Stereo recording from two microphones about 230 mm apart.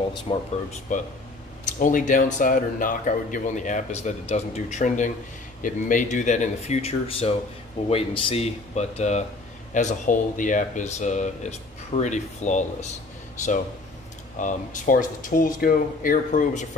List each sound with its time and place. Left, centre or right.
0.3 s a man's voice: left
14.4 s a man's voice: left